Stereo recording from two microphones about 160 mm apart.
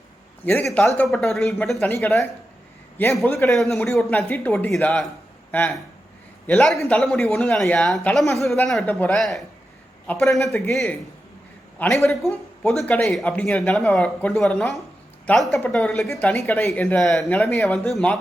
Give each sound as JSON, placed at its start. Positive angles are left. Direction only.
{"t": 0.6, "sound": "speech", "side_deg": 5}
{"t": 1.9, "sound": "speech", "side_deg": 15}
{"t": 3.2, "sound": "speech", "side_deg": 15}
{"t": 3.5, "sound": "a man's voice", "side_deg": 0}
{"t": 16.0, "sound": "speech", "side_deg": 15}
{"t": 16.4, "sound": "speech", "side_deg": 5}